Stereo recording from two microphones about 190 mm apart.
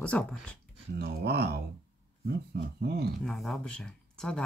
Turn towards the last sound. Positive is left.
turn(degrees=5)  # may be behind; listen again after turning